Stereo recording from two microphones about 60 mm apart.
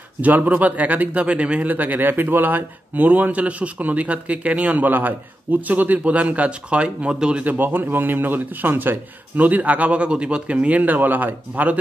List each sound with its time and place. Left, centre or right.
0.2 s speech: right
1.7 s speech: right
7.4 s speech: right